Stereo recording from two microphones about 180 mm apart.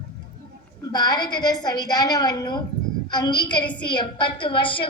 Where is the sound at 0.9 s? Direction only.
25° left (ahead or behind).